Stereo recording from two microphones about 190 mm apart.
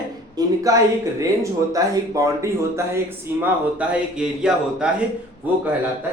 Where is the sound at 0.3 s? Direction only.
20° right (ahead or behind).